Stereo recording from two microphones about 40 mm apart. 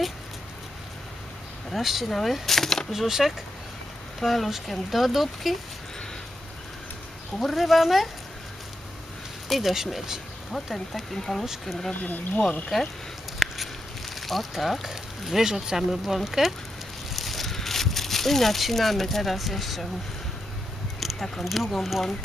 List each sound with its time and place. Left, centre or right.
1.7 s speech: centre
2.9 s speech: centre
7.3 s speech: centre
9.5 s speech: centre
11.1 s speech: centre
12.0 s speech: left
12.7 s speech: centre
21.0 s speech: centre